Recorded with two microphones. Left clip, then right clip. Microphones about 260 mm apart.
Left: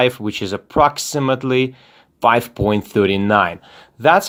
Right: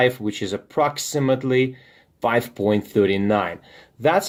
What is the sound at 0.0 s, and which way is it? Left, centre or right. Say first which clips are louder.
Speech: left 3 dB; left.